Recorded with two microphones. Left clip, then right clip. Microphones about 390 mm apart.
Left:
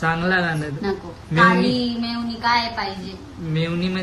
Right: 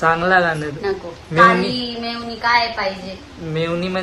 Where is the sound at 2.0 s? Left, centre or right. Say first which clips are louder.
Right 4 dB; centre.